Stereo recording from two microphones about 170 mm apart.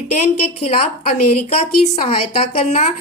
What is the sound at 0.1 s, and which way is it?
A woman's voice, 40° left (ahead or behind).